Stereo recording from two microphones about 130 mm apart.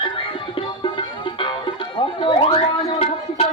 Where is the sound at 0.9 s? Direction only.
40° left (ahead or behind).